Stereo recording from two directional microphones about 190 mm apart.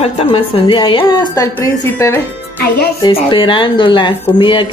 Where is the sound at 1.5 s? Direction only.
15° left (ahead or behind).